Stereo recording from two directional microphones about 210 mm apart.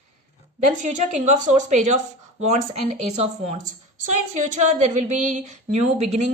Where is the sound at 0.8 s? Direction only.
35° right (ahead or behind).